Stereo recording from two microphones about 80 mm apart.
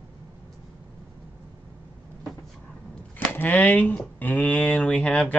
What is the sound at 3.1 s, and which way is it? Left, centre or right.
Speech, left.